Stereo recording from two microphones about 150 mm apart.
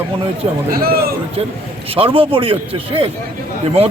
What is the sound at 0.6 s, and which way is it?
Speech, 75° right (ahead or behind).